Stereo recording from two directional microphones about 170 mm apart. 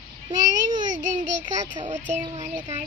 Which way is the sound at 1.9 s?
45° right (ahead or behind).